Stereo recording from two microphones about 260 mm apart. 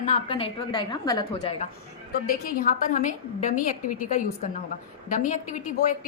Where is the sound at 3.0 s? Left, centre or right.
Left.